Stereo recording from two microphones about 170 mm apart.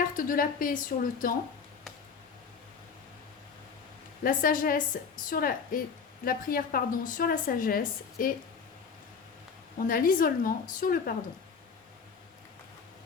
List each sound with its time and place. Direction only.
0.0 s a woman's voice: 55° left (ahead or behind)
4.2 s a woman's voice: 55° left (ahead or behind)
9.7 s a woman's voice: 60° left (ahead or behind)